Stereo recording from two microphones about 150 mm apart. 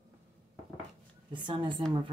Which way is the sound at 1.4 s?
35° right (ahead or behind).